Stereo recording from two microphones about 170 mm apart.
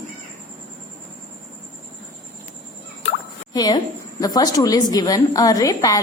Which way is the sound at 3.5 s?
25° left (ahead or behind).